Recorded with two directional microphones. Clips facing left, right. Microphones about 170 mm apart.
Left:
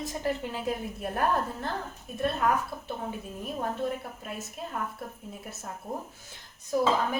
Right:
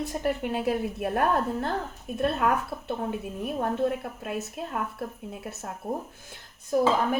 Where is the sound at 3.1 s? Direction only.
65° right (ahead or behind).